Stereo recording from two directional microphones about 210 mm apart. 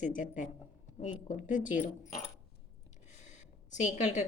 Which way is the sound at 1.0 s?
35° left (ahead or behind).